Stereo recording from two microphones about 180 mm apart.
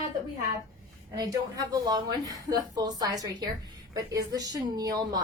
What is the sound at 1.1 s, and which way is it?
A woman's voice, 20° right (ahead or behind).